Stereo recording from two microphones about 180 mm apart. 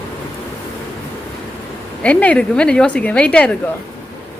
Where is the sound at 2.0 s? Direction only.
10° left (ahead or behind).